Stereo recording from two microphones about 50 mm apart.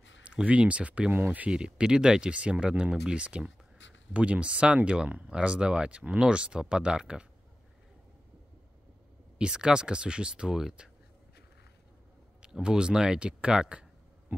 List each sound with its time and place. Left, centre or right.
0.2 s speech: right
9.4 s speech: centre
12.4 s speech: centre